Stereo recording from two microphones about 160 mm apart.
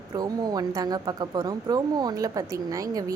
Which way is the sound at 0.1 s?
25° right (ahead or behind).